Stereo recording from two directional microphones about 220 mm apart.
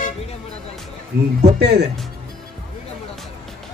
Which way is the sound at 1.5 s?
50° right (ahead or behind).